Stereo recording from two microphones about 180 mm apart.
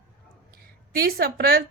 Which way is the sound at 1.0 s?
60° right (ahead or behind).